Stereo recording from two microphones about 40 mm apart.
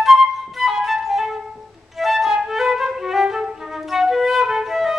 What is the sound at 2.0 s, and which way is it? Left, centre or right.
Flute, centre.